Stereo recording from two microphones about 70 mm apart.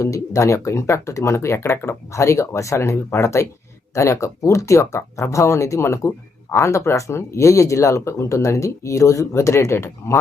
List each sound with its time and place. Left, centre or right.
0.0 s speech: left